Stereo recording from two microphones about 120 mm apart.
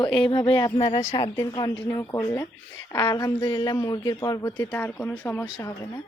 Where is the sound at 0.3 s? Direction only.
45° left (ahead or behind).